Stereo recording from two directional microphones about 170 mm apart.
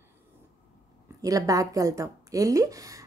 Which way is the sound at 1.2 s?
20° right (ahead or behind).